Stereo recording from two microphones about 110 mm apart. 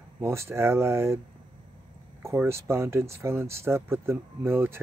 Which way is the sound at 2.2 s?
25° right (ahead or behind).